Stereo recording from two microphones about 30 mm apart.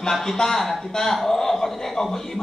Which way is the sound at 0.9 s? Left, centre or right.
Centre.